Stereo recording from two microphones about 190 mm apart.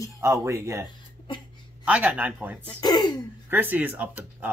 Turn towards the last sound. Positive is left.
turn(degrees=-10)  # may be behind; listen again after turning